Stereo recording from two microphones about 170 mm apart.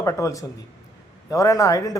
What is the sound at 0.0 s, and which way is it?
Speech, 20° left (ahead or behind).